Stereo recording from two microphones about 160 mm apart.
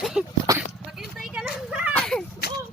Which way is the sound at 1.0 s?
5° right (ahead or behind).